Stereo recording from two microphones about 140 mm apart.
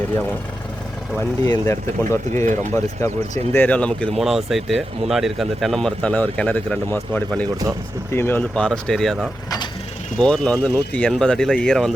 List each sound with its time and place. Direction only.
1.5 s speech: 20° left (ahead or behind); by 11.9 s 5° left (ahead or behind)